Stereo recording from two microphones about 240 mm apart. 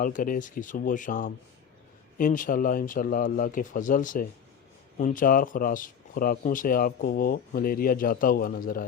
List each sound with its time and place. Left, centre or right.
0.0 s speech: left